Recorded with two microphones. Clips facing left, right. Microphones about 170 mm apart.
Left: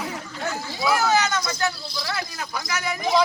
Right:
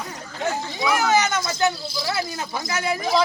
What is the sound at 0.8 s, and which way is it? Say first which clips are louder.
Speech: even; 15° right (ahead or behind).